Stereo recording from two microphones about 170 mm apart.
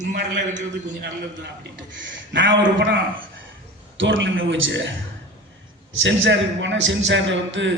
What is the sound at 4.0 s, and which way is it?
Speech, 90° right.